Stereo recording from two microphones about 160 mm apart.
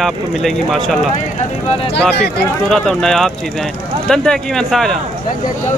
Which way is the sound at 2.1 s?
90° left.